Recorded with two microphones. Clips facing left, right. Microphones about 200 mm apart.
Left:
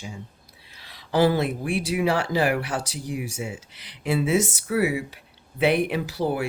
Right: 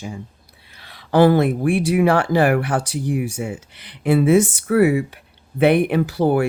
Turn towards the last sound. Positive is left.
turn(degrees=-55)  # may be behind; listen again after turning